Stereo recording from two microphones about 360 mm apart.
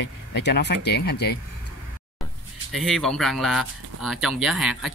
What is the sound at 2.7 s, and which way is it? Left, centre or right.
Speech, centre.